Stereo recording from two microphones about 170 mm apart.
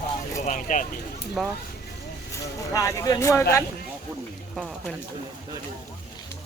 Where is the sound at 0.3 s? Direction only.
50° left (ahead or behind).